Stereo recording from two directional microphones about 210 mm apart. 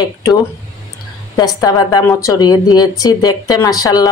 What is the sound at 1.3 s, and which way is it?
Speech, 15° left (ahead or behind).